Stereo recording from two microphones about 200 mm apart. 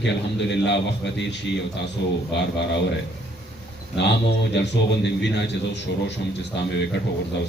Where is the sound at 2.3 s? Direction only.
60° left (ahead or behind).